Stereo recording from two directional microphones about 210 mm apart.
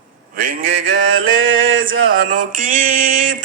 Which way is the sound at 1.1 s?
70° right (ahead or behind).